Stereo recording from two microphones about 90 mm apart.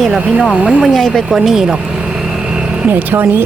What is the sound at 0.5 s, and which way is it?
Speech, 10° right (ahead or behind).